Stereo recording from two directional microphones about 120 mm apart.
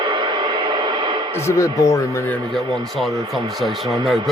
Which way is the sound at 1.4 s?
25° left (ahead or behind).